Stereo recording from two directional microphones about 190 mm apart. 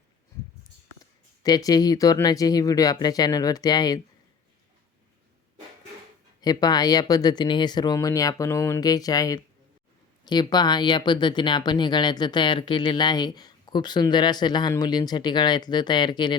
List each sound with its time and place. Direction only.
1.4 s speech: 20° left (ahead or behind)
6.4 s speech: 20° left (ahead or behind)